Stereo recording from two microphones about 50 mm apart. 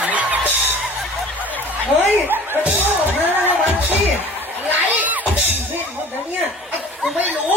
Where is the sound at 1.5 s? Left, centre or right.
Left.